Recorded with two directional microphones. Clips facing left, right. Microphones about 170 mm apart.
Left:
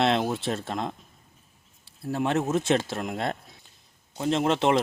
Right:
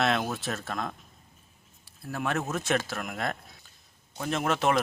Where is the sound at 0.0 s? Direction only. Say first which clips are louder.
Left 4 dB; 25° left (ahead or behind).